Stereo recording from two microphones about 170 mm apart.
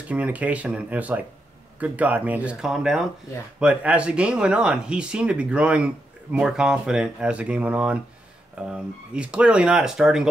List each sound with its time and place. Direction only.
0.1 s speech: 10° right (ahead or behind)